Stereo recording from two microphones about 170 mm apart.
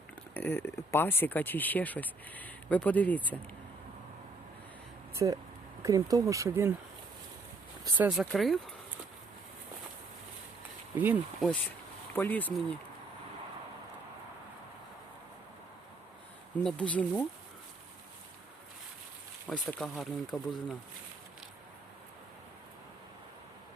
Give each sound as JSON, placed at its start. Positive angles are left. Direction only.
{"t": 0.3, "sound": "speech", "side_deg": 10}
{"t": 5.1, "sound": "speech", "side_deg": -20}
{"t": 7.9, "sound": "speech", "side_deg": -5}
{"t": 10.9, "sound": "speech", "side_deg": -10}
{"t": 12.1, "sound": "speech", "side_deg": 10}
{"t": 16.6, "sound": "speech", "side_deg": 5}
{"t": 19.5, "sound": "speech", "side_deg": 0}